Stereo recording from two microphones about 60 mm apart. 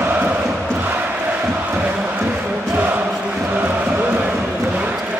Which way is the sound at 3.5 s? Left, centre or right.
Right.